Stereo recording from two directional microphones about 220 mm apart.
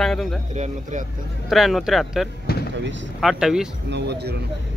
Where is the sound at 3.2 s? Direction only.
Centre (ahead or behind).